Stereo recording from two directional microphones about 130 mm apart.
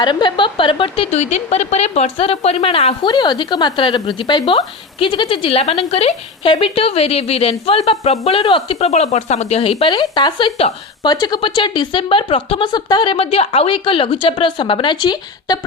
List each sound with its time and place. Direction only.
0.0 s a woman's voice: 35° left (ahead or behind)
9.9 s speech: 35° left (ahead or behind)